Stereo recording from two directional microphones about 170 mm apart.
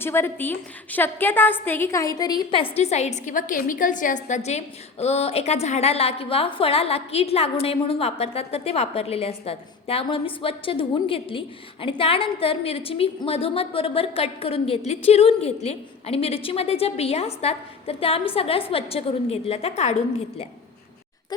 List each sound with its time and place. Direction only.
0.0 s a woman's voice: 15° left (ahead or behind)
2.7 s a woman's voice: 40° left (ahead or behind)